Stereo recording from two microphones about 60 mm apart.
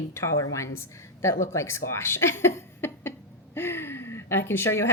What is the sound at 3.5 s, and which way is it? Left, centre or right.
Gasp, left.